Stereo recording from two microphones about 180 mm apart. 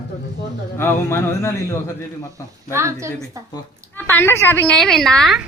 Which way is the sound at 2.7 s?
15° right (ahead or behind).